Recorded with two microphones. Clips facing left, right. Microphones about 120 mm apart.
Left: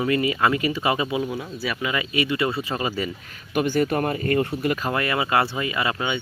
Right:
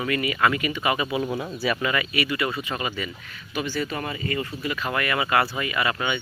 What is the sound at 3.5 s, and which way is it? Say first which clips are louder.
Speech: left 7 dB; 50° left (ahead or behind).